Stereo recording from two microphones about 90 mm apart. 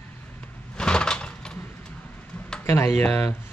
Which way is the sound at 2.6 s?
30° left (ahead or behind).